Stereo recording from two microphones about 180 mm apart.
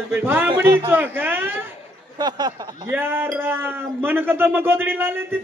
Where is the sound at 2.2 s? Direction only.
25° right (ahead or behind).